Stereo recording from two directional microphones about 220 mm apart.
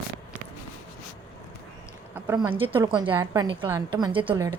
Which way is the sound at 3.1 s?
20° right (ahead or behind).